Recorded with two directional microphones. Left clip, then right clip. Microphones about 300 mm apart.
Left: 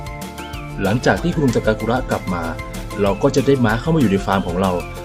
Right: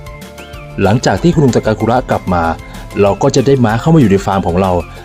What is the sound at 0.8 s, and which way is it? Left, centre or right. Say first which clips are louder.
Speech: right 5 dB; right.